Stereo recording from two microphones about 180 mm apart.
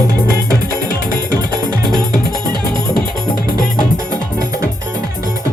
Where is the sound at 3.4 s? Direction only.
25° right (ahead or behind).